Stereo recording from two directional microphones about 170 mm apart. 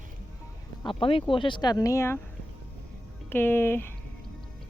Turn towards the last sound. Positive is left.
turn(degrees=15)  # may be behind; listen again after turning